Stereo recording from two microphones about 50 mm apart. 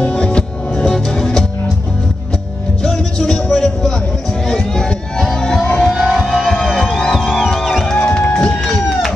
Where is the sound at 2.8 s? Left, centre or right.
Centre.